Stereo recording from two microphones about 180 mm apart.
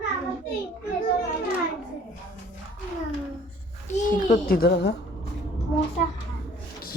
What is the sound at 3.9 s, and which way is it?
A child's voice, 45° left (ahead or behind).